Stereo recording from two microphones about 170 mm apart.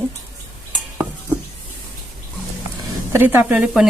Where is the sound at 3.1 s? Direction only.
10° right (ahead or behind).